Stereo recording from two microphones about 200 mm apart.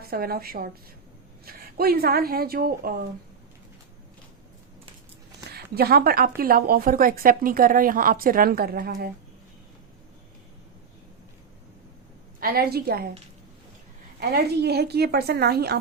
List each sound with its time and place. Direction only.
0.0 s a woman's voice: 50° right (ahead or behind)
5.7 s a woman's voice: 50° right (ahead or behind)
12.4 s a woman's voice: 50° right (ahead or behind)
14.2 s a woman's voice: 55° right (ahead or behind)